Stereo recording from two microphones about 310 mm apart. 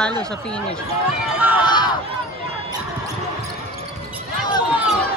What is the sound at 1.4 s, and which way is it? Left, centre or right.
Crowd, centre.